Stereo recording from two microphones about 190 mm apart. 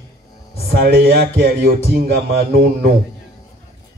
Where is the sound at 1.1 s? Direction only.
55° right (ahead or behind).